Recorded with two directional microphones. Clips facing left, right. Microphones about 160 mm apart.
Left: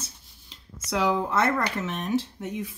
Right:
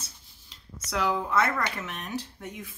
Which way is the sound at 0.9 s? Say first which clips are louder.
Left 3 dB; 20° left (ahead or behind).